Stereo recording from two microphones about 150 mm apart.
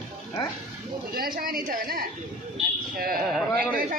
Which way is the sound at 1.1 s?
80° right.